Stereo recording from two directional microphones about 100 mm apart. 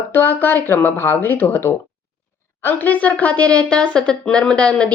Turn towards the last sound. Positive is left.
turn(degrees=10)  # may be behind; listen again after turning